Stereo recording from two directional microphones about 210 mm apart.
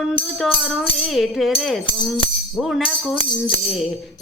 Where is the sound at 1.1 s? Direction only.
Centre (ahead or behind).